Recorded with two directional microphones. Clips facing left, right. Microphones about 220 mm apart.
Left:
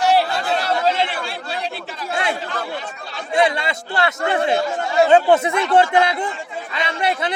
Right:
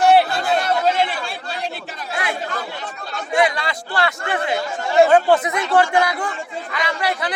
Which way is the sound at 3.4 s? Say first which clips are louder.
Left 1 dB; 25° left (ahead or behind).